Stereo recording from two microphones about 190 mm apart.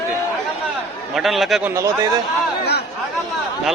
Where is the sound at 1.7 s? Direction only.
15° right (ahead or behind).